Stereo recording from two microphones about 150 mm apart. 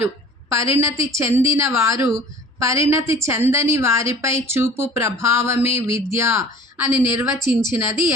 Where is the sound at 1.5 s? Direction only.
20° right (ahead or behind).